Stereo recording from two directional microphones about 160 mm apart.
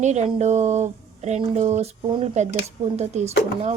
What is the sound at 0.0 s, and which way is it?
A woman's voice, 45° right (ahead or behind).